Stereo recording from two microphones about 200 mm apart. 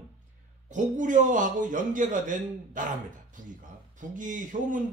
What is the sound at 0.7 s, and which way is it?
A man's voice, 40° right (ahead or behind).